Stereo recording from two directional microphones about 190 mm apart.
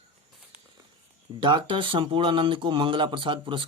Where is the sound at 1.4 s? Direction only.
25° right (ahead or behind).